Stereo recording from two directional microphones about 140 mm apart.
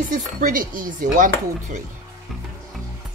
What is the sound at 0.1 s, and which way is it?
Speech, 80° right.